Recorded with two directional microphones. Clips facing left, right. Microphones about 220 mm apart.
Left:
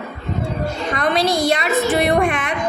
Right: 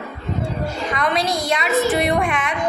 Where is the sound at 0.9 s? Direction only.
30° left (ahead or behind).